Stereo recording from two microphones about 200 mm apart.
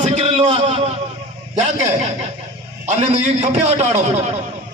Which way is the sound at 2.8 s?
35° right (ahead or behind).